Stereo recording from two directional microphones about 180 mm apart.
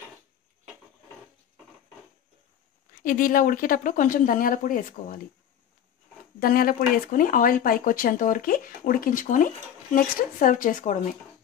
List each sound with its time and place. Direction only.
2.9 s speech: 50° left (ahead or behind)
6.4 s speech: 55° left (ahead or behind)